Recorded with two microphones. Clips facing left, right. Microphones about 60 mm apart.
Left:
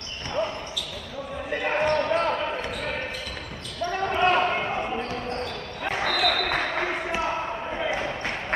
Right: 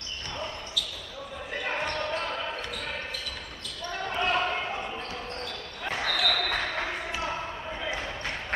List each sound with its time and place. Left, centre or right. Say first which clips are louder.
1.5 s basketball bounce: left 8 dB; left
4.0 s basketball bounce: left 6 dB; left
5.4 s basketball bounce: left 5 dB; left